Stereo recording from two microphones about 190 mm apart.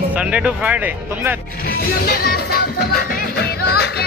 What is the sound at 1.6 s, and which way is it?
Music, 55° left (ahead or behind).